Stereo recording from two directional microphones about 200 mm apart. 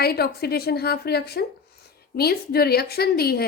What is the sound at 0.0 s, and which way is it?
A woman's voice, 50° left (ahead or behind).